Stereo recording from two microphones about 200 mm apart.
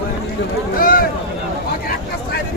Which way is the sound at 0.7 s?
45° left (ahead or behind).